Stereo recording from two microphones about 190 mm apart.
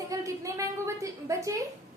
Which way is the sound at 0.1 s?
15° right (ahead or behind).